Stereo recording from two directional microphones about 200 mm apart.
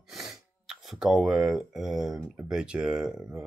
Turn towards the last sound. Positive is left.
turn(degrees=-5)  # may be behind; listen again after turning